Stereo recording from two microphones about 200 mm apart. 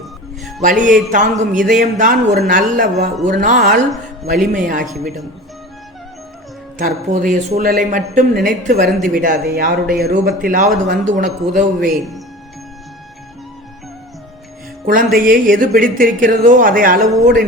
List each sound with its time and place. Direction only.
0.6 s a man's voice: 40° right (ahead or behind)
6.7 s a man's voice: 40° right (ahead or behind)
14.8 s speech: 45° right (ahead or behind)